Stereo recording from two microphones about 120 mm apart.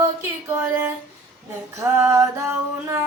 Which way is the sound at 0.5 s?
20° right (ahead or behind).